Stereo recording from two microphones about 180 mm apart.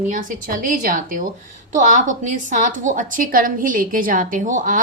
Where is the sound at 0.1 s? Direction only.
45° right (ahead or behind).